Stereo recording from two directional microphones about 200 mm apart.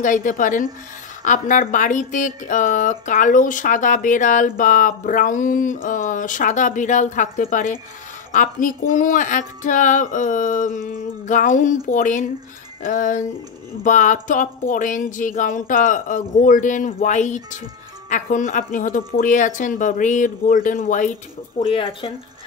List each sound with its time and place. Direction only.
0.0 s speech: 40° left (ahead or behind)
21.5 s speech: 25° left (ahead or behind)